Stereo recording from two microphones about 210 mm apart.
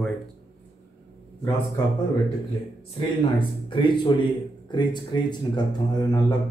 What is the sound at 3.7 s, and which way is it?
Speech, 25° left (ahead or behind).